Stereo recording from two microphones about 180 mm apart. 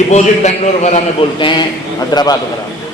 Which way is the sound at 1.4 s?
25° left (ahead or behind).